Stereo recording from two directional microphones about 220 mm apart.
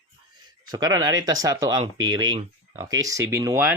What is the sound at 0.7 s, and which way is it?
Speech, 15° right (ahead or behind).